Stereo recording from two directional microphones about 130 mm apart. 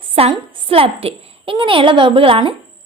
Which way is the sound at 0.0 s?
45° right (ahead or behind).